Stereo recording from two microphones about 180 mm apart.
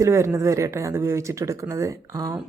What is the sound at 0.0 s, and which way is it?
A woman's voice, 15° right (ahead or behind).